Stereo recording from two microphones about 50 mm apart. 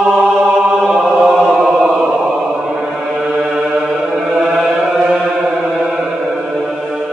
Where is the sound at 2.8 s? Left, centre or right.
Centre.